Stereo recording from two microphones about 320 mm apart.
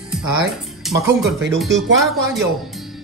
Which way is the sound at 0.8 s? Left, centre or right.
Centre.